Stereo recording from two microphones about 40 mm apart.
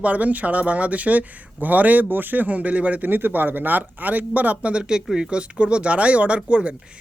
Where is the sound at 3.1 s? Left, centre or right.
Right; by 5.4 s centre.